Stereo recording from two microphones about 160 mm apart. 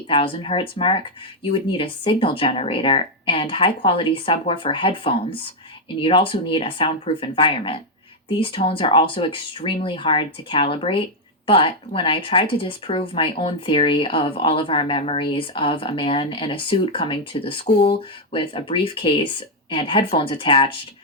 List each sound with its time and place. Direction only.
0.1 s speech: 35° left (ahead or behind)